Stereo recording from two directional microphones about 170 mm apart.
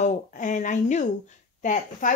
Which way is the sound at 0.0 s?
45° left (ahead or behind).